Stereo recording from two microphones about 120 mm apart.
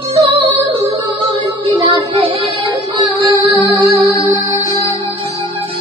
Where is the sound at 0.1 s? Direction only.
55° right (ahead or behind).